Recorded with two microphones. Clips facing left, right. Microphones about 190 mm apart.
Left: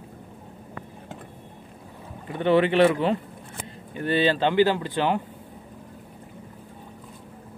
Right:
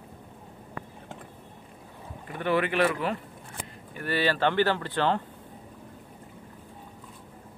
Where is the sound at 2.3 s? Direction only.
25° left (ahead or behind).